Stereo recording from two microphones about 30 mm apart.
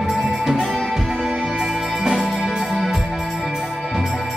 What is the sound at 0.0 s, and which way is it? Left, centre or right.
Music, centre.